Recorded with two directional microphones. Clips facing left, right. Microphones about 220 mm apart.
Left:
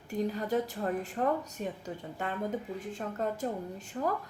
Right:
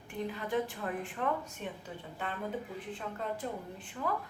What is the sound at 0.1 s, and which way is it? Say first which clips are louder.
Speech: left 4 dB; 40° left (ahead or behind).